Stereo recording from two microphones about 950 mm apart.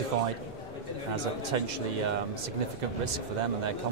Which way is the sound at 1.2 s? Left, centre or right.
Right.